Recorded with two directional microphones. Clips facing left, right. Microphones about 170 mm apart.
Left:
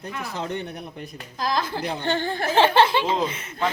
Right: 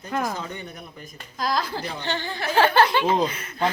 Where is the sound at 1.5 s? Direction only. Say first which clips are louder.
Even; 20° left (ahead or behind).